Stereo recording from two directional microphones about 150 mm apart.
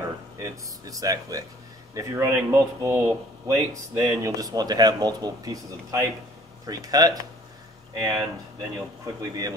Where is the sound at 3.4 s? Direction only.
20° right (ahead or behind).